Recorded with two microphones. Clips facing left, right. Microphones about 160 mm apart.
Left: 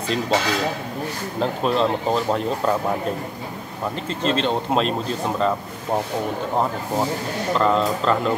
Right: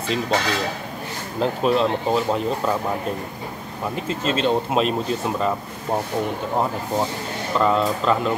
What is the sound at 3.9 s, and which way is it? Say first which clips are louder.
Speech: left 1 dB; 5° right (ahead or behind).